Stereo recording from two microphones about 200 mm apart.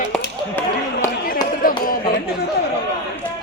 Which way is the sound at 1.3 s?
45° left (ahead or behind).